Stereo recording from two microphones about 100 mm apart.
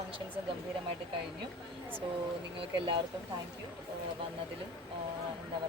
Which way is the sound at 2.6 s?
55° right (ahead or behind).